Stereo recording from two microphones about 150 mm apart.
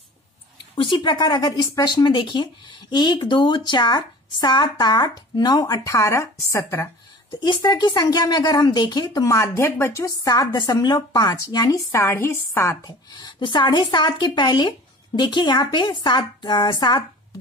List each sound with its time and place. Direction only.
0.7 s speech: 30° left (ahead or behind)
7.2 s speech: 30° left (ahead or behind)
13.1 s speech: 30° left (ahead or behind)